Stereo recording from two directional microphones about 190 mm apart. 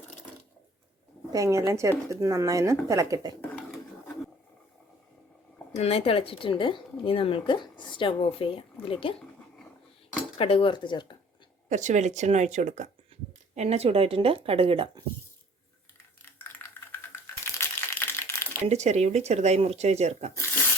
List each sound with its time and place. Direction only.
1.3 s speech: 15° right (ahead or behind)
5.7 s a woman's voice: 30° left (ahead or behind)
10.3 s a woman's voice: 30° left (ahead or behind)
11.7 s speech: 40° right (ahead or behind)
16.2 s a sound: 10° left (ahead or behind)
17.6 s crumpling: 10° left (ahead or behind)
18.6 s speech: 35° right (ahead or behind)